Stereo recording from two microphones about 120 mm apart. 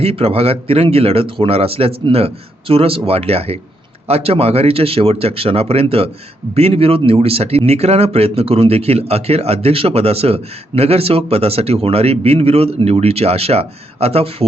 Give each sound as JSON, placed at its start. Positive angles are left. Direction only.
{"t": 0.0, "sound": "speech", "side_deg": -55}